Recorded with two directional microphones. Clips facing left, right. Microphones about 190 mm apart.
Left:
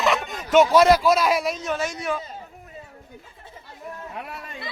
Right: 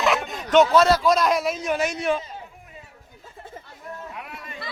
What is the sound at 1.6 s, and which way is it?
Speech, 15° right (ahead or behind).